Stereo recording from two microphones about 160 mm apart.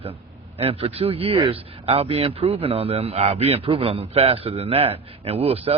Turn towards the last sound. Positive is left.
turn(degrees=-35)  # may be behind; listen again after turning